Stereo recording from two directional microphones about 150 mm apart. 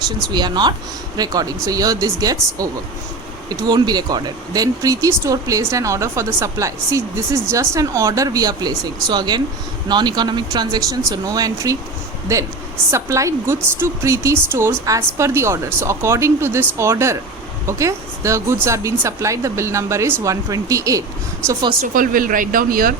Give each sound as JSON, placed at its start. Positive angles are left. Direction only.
{"t": 0.3, "sound": "speech", "side_deg": -30}
{"t": 3.7, "sound": "speech", "side_deg": -25}
{"t": 12.9, "sound": "speech", "side_deg": -20}
{"t": 21.8, "sound": "speech", "side_deg": -65}